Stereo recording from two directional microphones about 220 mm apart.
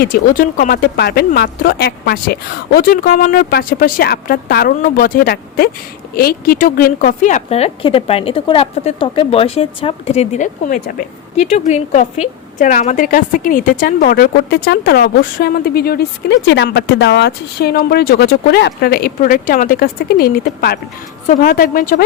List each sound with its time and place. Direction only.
0.0 s a woman's voice: 40° left (ahead or behind)